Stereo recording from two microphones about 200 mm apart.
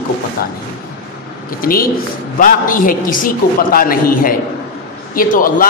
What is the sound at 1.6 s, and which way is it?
A man's voice, 45° left (ahead or behind).